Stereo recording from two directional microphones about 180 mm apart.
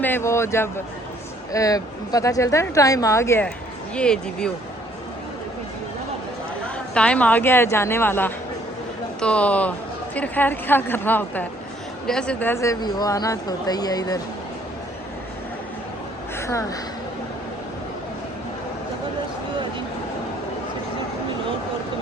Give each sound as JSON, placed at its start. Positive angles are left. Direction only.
{"t": 0.0, "sound": "speech", "side_deg": 15}
{"t": 6.9, "sound": "speech", "side_deg": 5}
{"t": 16.4, "sound": "speech", "side_deg": 15}